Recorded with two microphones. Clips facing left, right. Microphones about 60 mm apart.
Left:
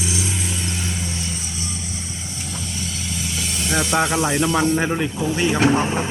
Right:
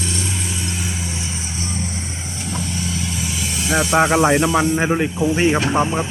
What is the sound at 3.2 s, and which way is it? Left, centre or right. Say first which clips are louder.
Vehicle: right 1 dB; centre.